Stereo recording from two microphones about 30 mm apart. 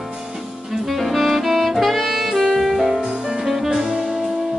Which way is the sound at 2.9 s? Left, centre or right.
Right.